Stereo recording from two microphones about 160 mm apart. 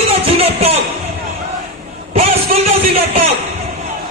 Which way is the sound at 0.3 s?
40° right (ahead or behind).